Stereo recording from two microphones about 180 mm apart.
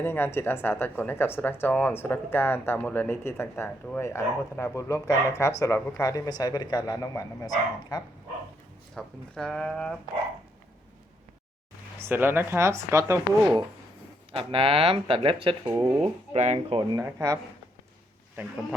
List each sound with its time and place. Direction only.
0.0 s speech: 10° left (ahead or behind)
9.0 s speech: 5° left (ahead or behind)
11.9 s speech: 10° right (ahead or behind)
14.3 s speech: 30° right (ahead or behind)
15.7 s speech: 15° right (ahead or behind)
16.3 s speech: 40° right (ahead or behind); by 17.4 s 20° right (ahead or behind)